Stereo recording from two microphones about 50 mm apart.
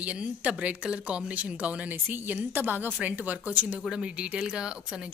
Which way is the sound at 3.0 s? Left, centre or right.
Right.